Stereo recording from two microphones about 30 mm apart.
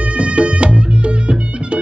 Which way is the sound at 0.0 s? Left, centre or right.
Right.